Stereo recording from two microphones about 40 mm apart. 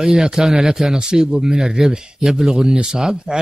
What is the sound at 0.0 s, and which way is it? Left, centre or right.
Speech, centre.